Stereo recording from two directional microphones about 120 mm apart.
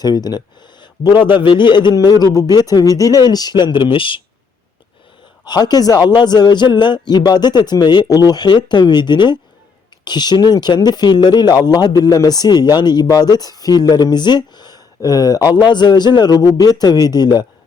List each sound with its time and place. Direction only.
0.0 s speech: 35° left (ahead or behind)
5.5 s speech: 35° left (ahead or behind)